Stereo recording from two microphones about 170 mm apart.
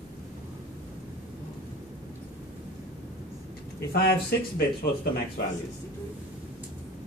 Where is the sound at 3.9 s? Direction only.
65° left (ahead or behind).